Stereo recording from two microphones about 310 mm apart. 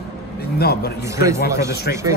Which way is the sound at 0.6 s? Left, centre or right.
Left.